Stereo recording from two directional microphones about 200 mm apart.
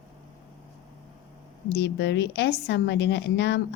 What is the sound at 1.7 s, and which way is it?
A woman's voice, 60° left (ahead or behind).